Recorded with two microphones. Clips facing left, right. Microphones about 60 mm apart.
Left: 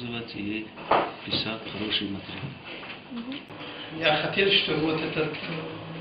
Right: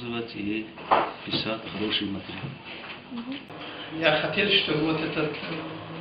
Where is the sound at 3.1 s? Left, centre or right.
Centre.